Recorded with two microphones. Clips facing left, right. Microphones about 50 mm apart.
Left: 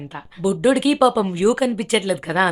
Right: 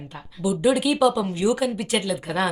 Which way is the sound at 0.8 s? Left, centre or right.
Centre.